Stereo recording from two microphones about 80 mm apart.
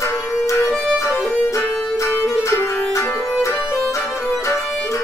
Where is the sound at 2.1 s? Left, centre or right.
Left.